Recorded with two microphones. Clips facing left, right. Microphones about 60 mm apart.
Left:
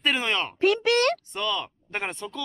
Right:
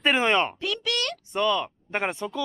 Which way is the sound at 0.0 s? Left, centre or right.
Right.